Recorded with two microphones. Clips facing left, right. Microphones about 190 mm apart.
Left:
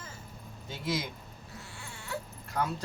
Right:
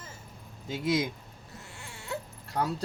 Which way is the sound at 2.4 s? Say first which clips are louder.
Right 2 dB; 35° right (ahead or behind).